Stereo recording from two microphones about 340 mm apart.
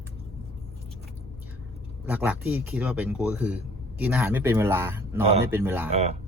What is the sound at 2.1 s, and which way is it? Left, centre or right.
Speech, centre.